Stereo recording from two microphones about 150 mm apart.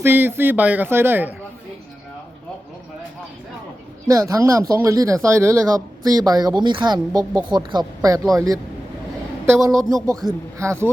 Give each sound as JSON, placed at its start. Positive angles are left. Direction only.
{"t": 0.0, "sound": "speech", "side_deg": -15}
{"t": 4.1, "sound": "speech", "side_deg": -20}